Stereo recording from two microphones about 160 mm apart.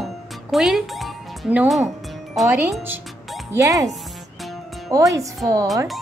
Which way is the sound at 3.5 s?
20° right (ahead or behind).